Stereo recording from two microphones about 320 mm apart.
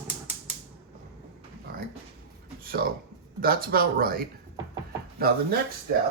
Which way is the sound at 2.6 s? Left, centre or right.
Right.